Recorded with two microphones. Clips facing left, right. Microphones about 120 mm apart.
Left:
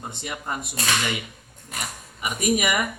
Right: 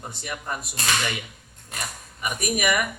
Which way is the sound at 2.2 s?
20° left (ahead or behind).